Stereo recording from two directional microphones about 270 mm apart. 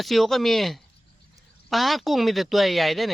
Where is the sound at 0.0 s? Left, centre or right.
Centre.